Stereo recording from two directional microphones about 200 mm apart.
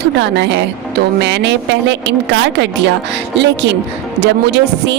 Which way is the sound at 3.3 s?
60° right (ahead or behind).